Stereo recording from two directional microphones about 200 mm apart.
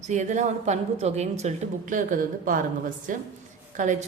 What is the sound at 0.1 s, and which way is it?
A woman's voice, 35° right (ahead or behind).